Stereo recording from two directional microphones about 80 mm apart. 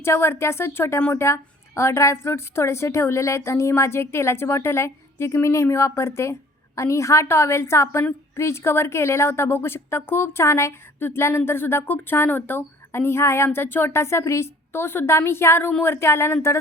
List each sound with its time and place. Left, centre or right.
0.0 s a woman's voice: left